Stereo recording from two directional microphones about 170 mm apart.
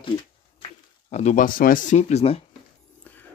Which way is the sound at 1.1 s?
45° left (ahead or behind).